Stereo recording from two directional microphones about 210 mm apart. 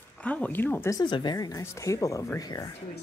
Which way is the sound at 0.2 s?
5° left (ahead or behind).